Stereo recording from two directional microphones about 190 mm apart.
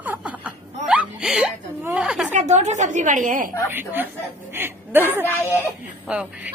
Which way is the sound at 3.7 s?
10° right (ahead or behind).